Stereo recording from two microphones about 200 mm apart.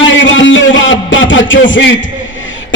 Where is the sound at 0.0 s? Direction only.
70° left (ahead or behind).